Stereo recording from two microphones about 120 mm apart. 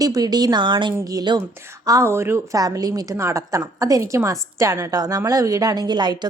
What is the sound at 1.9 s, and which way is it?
A woman's voice, 25° right (ahead or behind).